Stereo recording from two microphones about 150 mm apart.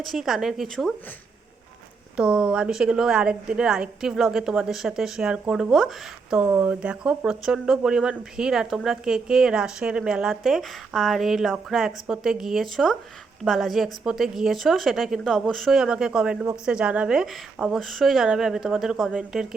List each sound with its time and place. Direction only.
0.0 s speech: centre (ahead or behind)
2.1 s speech: 5° right (ahead or behind)